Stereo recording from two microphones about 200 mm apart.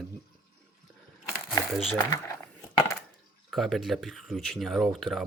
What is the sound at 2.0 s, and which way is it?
Speech, 15° left (ahead or behind).